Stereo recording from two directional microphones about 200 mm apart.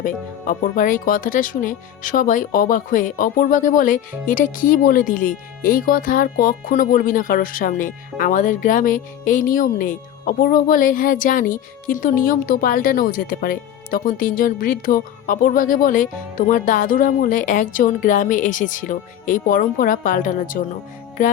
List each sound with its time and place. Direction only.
0.0 s speech: 45° left (ahead or behind)